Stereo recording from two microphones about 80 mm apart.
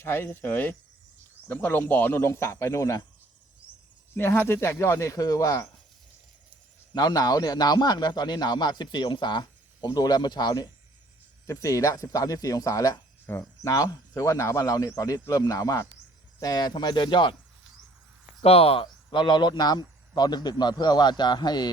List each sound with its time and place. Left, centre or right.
0.0 s speech: left
4.1 s speech: left
6.9 s a man's voice: left
11.4 s speech: left
13.3 s speech: left
13.7 s speech: left
16.4 s speech: left
18.8 s a man's voice: left